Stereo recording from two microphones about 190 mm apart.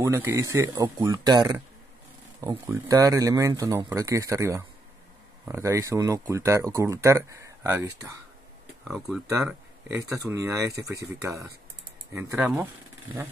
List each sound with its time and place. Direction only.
0.0 s speech: 15° right (ahead or behind)
8.8 s speech: centre (ahead or behind)
9.3 s speech: 15° right (ahead or behind)